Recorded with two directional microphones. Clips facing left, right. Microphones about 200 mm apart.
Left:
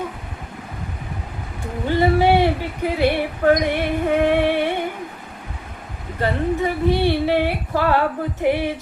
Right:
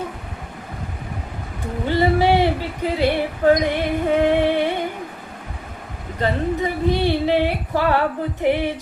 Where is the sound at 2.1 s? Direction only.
15° left (ahead or behind).